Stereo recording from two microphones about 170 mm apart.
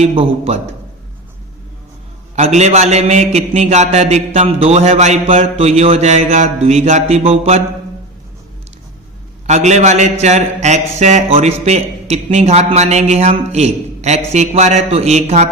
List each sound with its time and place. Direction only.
0.0 s a man's voice: 35° right (ahead or behind)
2.3 s a man's voice: 40° right (ahead or behind)
9.5 s a man's voice: 45° right (ahead or behind)